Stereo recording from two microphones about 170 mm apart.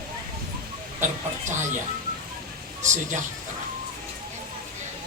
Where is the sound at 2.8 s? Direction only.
45° right (ahead or behind).